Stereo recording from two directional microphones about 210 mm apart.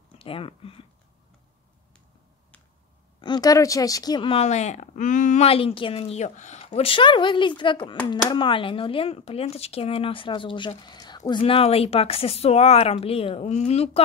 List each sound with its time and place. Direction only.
0.2 s speech: 25° left (ahead or behind)
3.2 s speech: 20° left (ahead or behind)